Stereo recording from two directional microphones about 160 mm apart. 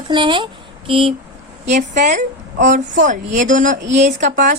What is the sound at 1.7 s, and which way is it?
A woman's voice, 50° right (ahead or behind).